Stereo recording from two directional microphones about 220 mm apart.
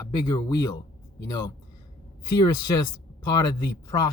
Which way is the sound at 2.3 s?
20° left (ahead or behind).